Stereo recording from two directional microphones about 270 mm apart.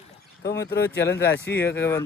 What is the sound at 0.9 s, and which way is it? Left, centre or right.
Speech, centre.